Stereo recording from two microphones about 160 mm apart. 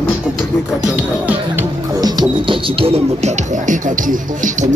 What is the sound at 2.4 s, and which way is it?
Speech, 35° right (ahead or behind).